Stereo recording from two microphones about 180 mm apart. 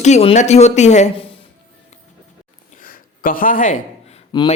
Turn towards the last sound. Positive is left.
turn(degrees=25)  # may be behind; listen again after turning